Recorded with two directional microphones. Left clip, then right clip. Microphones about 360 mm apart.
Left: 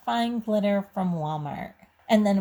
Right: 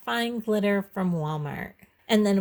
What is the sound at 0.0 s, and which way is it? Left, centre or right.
Speech, right.